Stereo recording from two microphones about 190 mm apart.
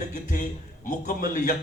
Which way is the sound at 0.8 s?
45° left (ahead or behind).